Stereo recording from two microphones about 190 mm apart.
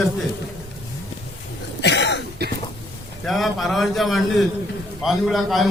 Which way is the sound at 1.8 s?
65° left (ahead or behind).